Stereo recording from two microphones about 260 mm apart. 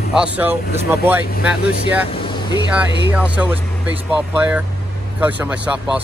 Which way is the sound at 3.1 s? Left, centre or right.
Centre.